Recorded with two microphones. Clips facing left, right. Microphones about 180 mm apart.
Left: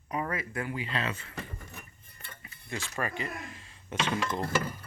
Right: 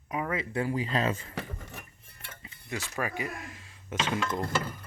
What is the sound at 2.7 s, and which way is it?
Speech, 10° right (ahead or behind).